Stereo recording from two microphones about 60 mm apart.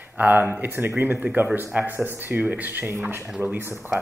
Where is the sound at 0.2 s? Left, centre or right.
Right.